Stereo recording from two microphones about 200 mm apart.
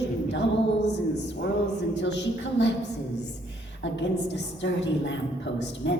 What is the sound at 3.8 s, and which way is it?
A woman's voice, 60° left (ahead or behind).